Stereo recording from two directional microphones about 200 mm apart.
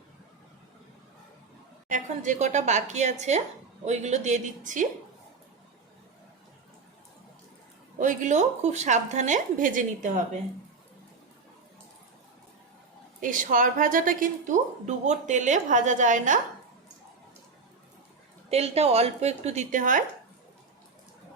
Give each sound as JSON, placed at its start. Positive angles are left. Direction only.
{"t": 1.9, "sound": "a woman's voice", "side_deg": -35}
{"t": 7.9, "sound": "a woman's voice", "side_deg": -40}
{"t": 13.2, "sound": "a woman's voice", "side_deg": -40}
{"t": 18.4, "sound": "a woman's voice", "side_deg": -30}